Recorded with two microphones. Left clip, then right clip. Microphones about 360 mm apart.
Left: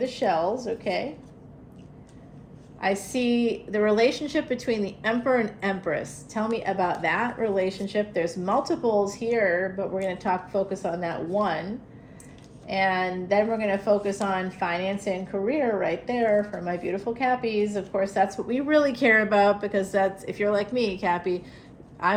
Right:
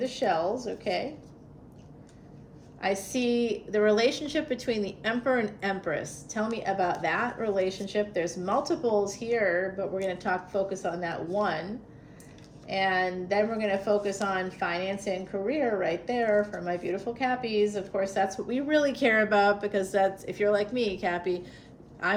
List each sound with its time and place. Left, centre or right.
0.0 s a woman's voice: centre
2.8 s a woman's voice: left